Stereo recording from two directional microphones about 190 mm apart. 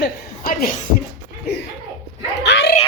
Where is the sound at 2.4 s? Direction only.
65° left (ahead or behind).